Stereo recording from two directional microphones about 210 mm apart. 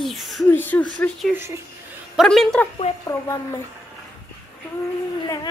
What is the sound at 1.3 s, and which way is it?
Speech, 10° right (ahead or behind).